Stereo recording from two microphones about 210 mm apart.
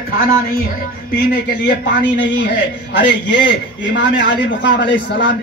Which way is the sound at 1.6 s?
55° left (ahead or behind).